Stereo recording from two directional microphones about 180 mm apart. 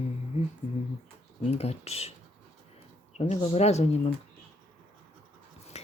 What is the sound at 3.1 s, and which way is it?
Speech, 35° left (ahead or behind).